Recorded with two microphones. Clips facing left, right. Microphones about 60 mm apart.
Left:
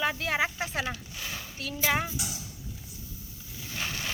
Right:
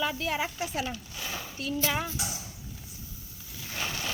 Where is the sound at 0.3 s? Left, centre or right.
Left.